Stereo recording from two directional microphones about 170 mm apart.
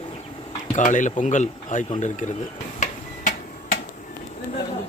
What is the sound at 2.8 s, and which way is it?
Tick-tock, 50° left (ahead or behind).